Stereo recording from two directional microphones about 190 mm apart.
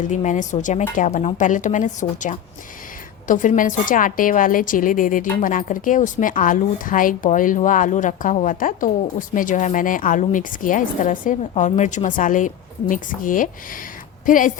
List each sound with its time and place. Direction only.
0.0 s a woman's voice: 40° left (ahead or behind)